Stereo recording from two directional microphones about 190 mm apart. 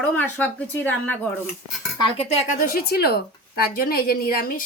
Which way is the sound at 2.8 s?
55° left (ahead or behind).